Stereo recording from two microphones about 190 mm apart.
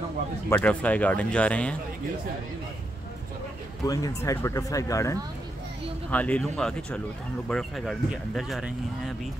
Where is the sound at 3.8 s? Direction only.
20° left (ahead or behind); by 9.1 s centre (ahead or behind).